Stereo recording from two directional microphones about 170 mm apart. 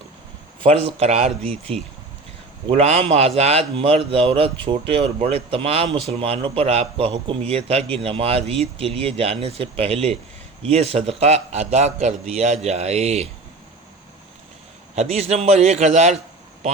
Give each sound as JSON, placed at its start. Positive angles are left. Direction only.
{"t": 0.6, "sound": "a man's voice", "side_deg": -35}
{"t": 14.9, "sound": "a man's voice", "side_deg": -40}